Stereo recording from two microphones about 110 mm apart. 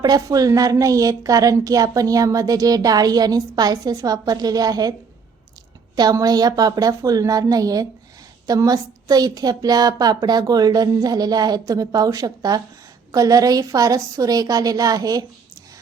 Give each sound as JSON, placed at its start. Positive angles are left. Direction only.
{"t": 0.0, "sound": "a woman's voice", "side_deg": -35}
{"t": 6.0, "sound": "a woman's voice", "side_deg": -35}